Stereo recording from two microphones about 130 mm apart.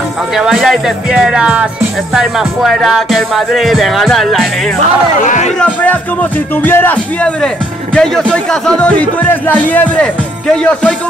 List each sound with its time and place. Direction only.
0.4 s music: centre (ahead or behind)
5.2 s a man's voice: 75° left (ahead or behind)
5.6 s speech: 10° left (ahead or behind)